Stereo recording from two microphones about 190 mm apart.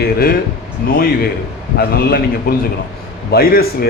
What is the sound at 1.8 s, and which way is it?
A man's voice, 55° left (ahead or behind).